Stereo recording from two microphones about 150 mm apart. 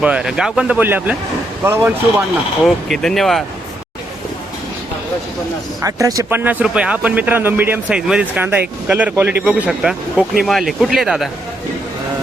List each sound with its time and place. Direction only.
0.0 s a man's voice: 5° right (ahead or behind)
2.6 s speech: centre (ahead or behind)
5.8 s speech: 20° right (ahead or behind)
6.4 s a man's voice: 10° right (ahead or behind)